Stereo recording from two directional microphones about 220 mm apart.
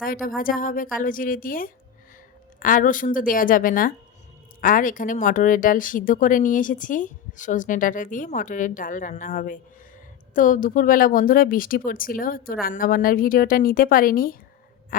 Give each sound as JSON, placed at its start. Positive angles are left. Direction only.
{"t": 0.0, "sound": "speech", "side_deg": 40}